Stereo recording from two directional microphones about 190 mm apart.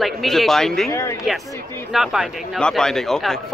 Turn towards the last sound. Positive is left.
turn(degrees=0)  # may be behind; listen again after turning